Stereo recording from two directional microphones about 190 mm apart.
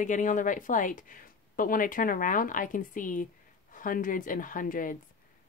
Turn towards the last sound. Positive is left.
turn(degrees=45)  # may be behind; listen again after turning